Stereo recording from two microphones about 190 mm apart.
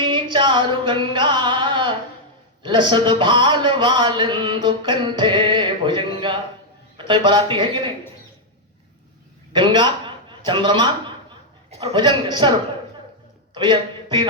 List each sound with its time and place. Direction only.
0.0 s singing: 25° right (ahead or behind)
2.6 s a man's voice: 25° right (ahead or behind)
9.5 s a man's voice: 25° right (ahead or behind)